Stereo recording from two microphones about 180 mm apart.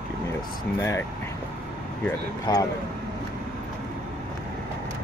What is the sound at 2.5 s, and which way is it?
Speech, 25° left (ahead or behind).